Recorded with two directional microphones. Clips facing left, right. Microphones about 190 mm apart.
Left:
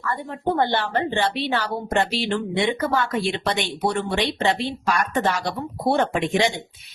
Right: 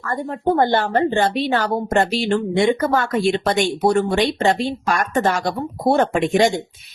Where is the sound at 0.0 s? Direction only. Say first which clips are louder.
Right 4 dB; 45° right (ahead or behind).